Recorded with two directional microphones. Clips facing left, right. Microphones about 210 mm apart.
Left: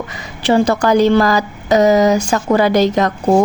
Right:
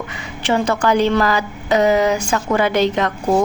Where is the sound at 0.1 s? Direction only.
35° left (ahead or behind).